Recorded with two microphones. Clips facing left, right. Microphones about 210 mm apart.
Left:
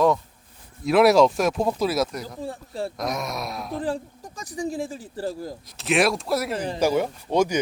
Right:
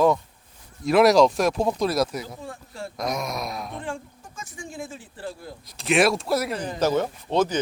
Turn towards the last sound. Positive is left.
turn(degrees=10)  # may be behind; listen again after turning